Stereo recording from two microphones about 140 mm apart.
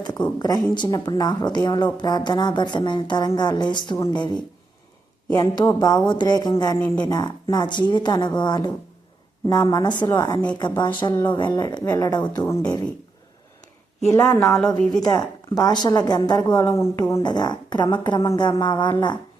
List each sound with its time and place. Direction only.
0.3 s a woman's voice: 30° left (ahead or behind)
14.1 s speech: 15° left (ahead or behind)
14.4 s speech: centre (ahead or behind)
15.0 s speech: 25° left (ahead or behind)